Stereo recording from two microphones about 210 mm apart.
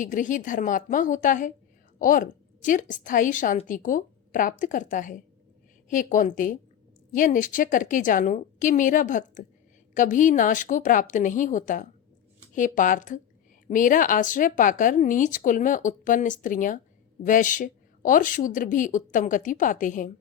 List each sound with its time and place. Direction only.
0.0 s a woman's voice: 40° left (ahead or behind)